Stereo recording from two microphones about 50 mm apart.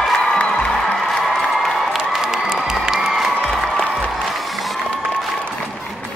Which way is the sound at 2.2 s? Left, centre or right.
Centre.